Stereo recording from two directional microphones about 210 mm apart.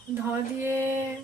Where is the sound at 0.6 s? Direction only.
10° right (ahead or behind).